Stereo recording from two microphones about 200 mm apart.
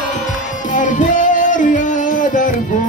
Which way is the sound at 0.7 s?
40° left (ahead or behind).